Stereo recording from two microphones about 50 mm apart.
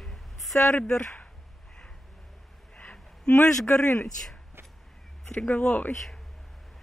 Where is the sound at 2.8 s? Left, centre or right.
Left.